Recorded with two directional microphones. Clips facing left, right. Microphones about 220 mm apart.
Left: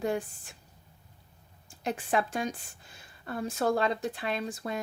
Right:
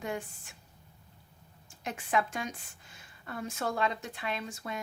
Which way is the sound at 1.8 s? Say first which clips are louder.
Left 2 dB; 35° left (ahead or behind).